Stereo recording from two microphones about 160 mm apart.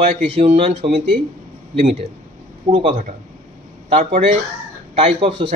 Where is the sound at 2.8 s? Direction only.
35° right (ahead or behind).